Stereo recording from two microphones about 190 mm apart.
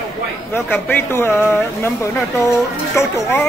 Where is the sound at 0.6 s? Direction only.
10° left (ahead or behind).